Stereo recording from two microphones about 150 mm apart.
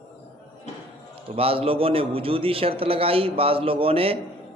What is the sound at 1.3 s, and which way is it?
A man's voice, 40° right (ahead or behind).